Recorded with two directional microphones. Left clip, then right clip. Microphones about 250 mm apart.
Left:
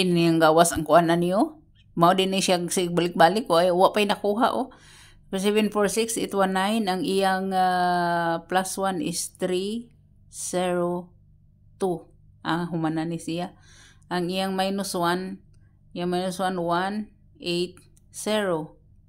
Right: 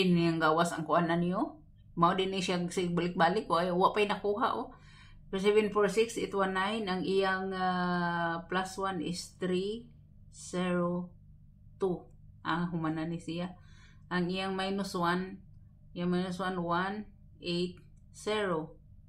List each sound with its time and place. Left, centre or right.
0.0 s speech: left